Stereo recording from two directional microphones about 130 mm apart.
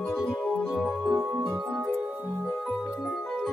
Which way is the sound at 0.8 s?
10° right (ahead or behind).